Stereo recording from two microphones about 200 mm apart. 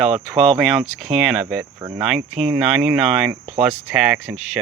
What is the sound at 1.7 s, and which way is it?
Speech, 15° right (ahead or behind).